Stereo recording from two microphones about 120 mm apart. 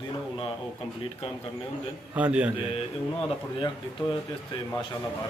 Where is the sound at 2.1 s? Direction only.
10° right (ahead or behind).